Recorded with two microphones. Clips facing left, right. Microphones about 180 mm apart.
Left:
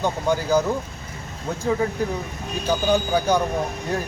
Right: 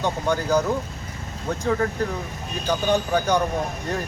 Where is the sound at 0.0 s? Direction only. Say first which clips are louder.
Left 1 dB; 10° left (ahead or behind).